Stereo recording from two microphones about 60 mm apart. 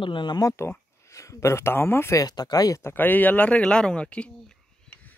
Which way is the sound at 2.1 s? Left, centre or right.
Left.